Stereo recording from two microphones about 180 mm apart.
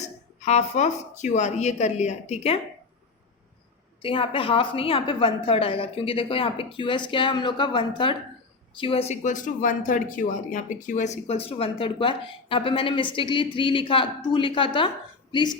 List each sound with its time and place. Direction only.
0.0 s speech: 40° left (ahead or behind)
4.0 s speech: 30° left (ahead or behind)